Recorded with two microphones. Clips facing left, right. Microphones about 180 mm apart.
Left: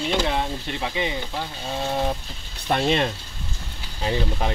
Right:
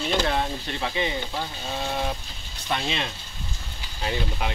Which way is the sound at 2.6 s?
50° left (ahead or behind).